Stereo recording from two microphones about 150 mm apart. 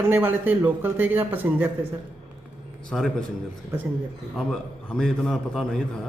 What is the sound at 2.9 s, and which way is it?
Speech, 5° left (ahead or behind).